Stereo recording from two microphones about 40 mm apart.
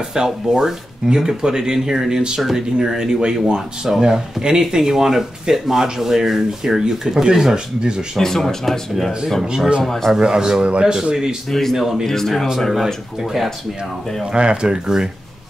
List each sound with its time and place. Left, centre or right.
0.1 s speech: centre
8.2 s speech: centre
9.4 s speech: centre
9.8 s speech: centre
10.1 s speech: centre
11.7 s speech: centre
12.1 s speech: centre
12.5 s speech: centre
14.3 s speech: right